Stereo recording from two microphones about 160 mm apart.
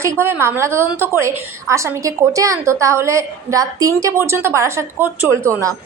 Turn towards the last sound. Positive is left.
turn(degrees=-15)  # may be behind; listen again after turning